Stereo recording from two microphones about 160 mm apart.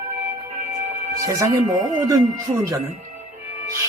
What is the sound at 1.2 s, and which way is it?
Music, 20° right (ahead or behind).